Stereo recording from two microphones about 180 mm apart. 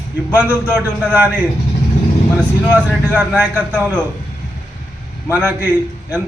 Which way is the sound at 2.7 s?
10° right (ahead or behind).